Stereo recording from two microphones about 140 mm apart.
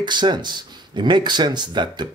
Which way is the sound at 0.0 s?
30° right (ahead or behind).